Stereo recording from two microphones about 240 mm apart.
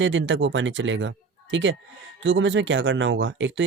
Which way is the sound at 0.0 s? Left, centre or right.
Right.